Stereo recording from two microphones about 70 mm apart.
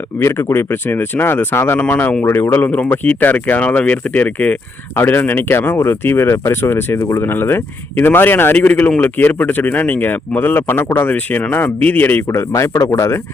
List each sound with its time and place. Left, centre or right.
0.2 s speech: left
1.8 s speech: left
12.3 s speech: left